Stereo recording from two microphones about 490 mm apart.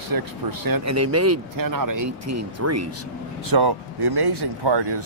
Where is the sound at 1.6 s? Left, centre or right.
Right.